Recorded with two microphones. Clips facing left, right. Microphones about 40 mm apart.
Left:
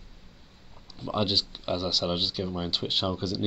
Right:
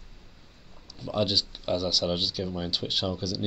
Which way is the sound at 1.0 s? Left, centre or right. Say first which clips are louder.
Even; centre.